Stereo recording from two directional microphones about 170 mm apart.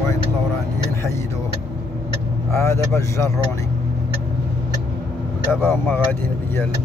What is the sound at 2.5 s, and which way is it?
Speech, 15° left (ahead or behind).